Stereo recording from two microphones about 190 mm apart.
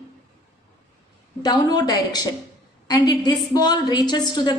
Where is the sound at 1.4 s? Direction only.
20° left (ahead or behind).